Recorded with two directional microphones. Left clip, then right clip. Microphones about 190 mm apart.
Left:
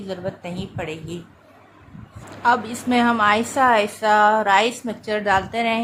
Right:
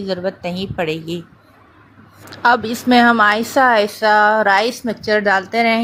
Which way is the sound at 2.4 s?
30° right (ahead or behind).